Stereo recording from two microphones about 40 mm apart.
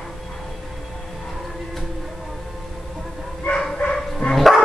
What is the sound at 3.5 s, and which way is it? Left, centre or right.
Bow-wow, left.